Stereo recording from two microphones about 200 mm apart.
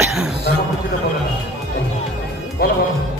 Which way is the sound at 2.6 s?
50° left (ahead or behind).